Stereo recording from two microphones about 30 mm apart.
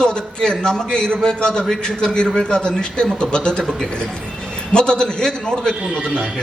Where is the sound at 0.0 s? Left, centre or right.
Left.